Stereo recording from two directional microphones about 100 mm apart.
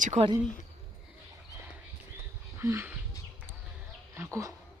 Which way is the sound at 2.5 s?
25° right (ahead or behind).